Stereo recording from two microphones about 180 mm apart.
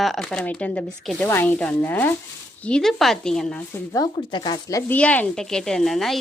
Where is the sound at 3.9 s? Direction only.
25° left (ahead or behind).